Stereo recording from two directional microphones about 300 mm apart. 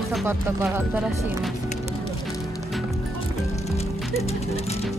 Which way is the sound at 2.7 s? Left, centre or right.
Centre.